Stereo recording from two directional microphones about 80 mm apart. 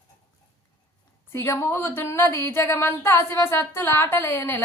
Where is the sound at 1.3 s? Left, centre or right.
Left.